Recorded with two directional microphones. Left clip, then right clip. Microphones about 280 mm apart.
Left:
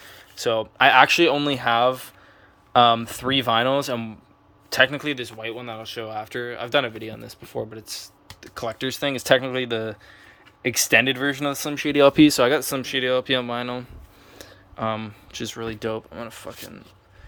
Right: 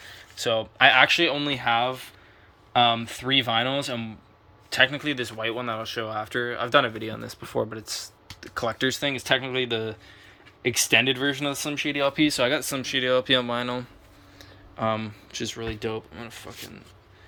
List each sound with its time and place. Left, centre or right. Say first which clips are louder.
0.0 s speech: left 3 dB; centre
5.1 s speech: right 2 dB; centre